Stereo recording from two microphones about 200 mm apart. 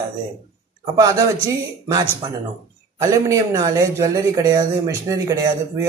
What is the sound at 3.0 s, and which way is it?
Speech, 15° right (ahead or behind).